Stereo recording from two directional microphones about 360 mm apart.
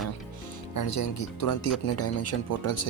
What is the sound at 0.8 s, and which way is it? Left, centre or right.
Speech, left.